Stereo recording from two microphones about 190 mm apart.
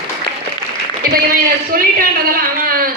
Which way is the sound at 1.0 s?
50° right (ahead or behind).